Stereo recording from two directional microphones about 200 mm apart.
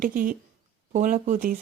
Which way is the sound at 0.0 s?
45° right (ahead or behind).